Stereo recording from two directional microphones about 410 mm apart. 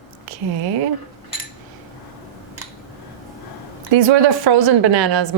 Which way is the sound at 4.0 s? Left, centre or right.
Right.